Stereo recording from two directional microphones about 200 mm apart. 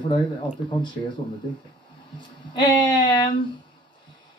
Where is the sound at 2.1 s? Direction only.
20° left (ahead or behind).